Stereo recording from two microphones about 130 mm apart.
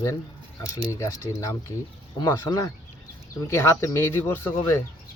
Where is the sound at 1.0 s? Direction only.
25° left (ahead or behind).